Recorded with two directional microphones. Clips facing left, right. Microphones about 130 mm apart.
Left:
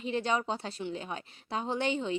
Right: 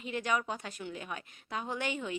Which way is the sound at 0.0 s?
30° left (ahead or behind).